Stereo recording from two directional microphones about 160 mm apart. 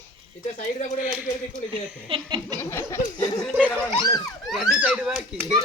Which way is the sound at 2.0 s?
30° right (ahead or behind).